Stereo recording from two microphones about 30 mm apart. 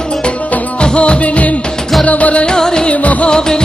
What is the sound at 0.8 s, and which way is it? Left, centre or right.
Music, left.